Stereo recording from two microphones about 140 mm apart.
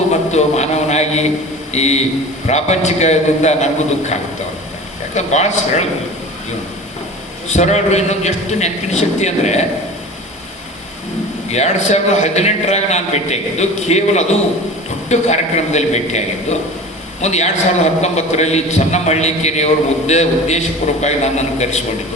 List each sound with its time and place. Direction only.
0.1 s a sound: 55° left (ahead or behind)
1.7 s a man's voice: 50° left (ahead or behind)
5.1 s speech: 55° left (ahead or behind)
7.4 s a man's voice: 55° left (ahead or behind)
11.5 s a man's voice: 55° left (ahead or behind)